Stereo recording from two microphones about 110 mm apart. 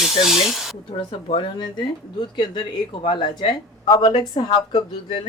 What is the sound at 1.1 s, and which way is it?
Speech, 50° left (ahead or behind).